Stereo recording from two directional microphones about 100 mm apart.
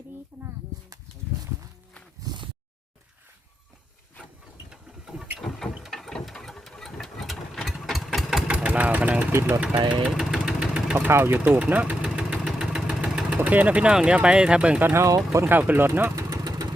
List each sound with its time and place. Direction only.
0.3 s a sound: 15° right (ahead or behind)
2.2 s a sound: 50° right (ahead or behind)
4.7 s engine: 5° right (ahead or behind)
9.3 s speech: 15° right (ahead or behind)
10.1 s engine: 5° right (ahead or behind)
10.9 s speech: 20° right (ahead or behind)
15.0 s speech: 30° right (ahead or behind)
15.5 s speech: 20° right (ahead or behind)
16.3 s vehicle: 40° right (ahead or behind)